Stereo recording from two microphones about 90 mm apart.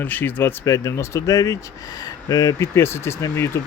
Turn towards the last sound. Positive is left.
turn(degrees=30)  # may be behind; listen again after turning